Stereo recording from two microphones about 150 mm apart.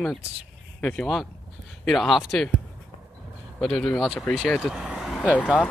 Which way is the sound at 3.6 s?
5° left (ahead or behind).